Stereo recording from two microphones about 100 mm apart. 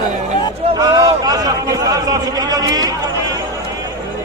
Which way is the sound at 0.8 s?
35° right (ahead or behind).